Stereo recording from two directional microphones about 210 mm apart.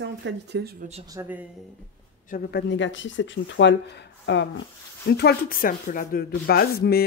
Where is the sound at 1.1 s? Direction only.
10° right (ahead or behind).